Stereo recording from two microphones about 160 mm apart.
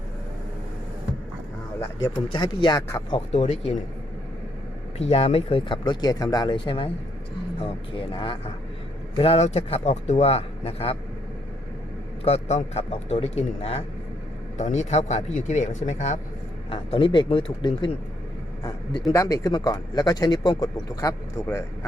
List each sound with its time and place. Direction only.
2.0 s speech: 25° left (ahead or behind)
3.1 s speech: 40° left (ahead or behind)
4.9 s speech: 40° left (ahead or behind)
7.9 s speech: 35° left (ahead or behind)
12.2 s speech: 45° left (ahead or behind)
16.6 s speech: 35° left (ahead or behind)
19.1 s speech: 20° left (ahead or behind)